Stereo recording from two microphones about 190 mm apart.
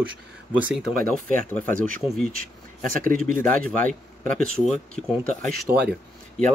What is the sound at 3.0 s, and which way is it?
Speech, 45° right (ahead or behind).